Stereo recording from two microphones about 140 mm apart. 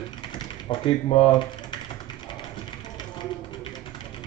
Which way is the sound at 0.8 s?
45° left (ahead or behind).